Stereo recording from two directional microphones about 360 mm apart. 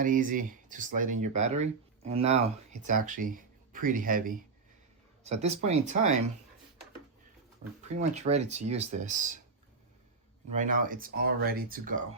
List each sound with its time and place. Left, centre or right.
0.0 s speech: right
7.9 s speech: centre
10.5 s speech: right